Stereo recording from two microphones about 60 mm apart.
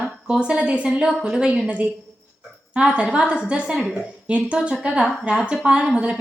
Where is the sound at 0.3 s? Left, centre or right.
Centre.